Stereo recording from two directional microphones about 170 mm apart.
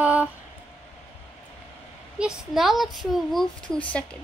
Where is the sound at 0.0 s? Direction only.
10° right (ahead or behind).